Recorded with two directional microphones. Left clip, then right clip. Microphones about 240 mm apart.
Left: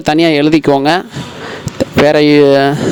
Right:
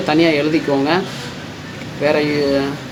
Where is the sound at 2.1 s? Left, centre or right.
Left.